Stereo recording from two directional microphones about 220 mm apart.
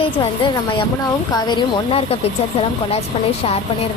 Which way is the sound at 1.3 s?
20° left (ahead or behind).